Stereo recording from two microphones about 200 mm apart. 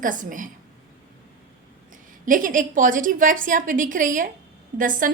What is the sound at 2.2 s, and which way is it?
A woman's voice, 40° right (ahead or behind).